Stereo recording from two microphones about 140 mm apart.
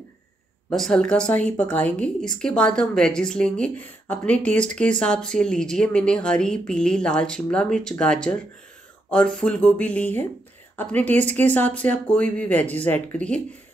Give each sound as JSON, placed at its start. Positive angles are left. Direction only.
{"t": 0.7, "sound": "a woman's voice", "side_deg": 5}